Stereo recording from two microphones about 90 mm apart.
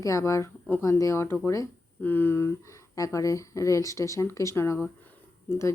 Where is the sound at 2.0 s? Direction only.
20° left (ahead or behind).